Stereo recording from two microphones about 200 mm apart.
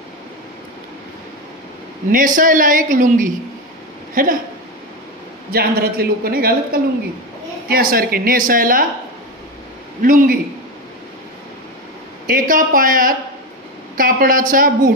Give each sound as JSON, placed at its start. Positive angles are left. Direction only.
{"t": 2.0, "sound": "a woman's voice", "side_deg": -40}
{"t": 5.5, "sound": "a woman's voice", "side_deg": -50}
{"t": 10.0, "sound": "a woman's voice", "side_deg": -45}
{"t": 12.3, "sound": "a woman's voice", "side_deg": -45}